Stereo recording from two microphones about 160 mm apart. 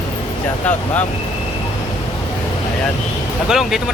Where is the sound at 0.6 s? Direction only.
10° left (ahead or behind).